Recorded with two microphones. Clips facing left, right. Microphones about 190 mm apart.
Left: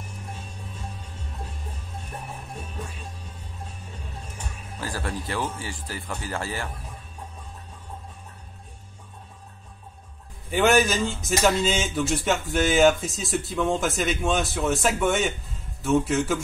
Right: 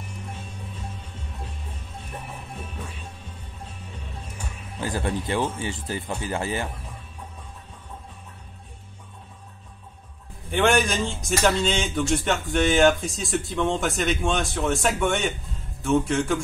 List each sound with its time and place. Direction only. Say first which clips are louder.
4.7 s speech: right 4 dB; 20° right (ahead or behind)
10.5 s speech: left 1 dB; 5° left (ahead or behind)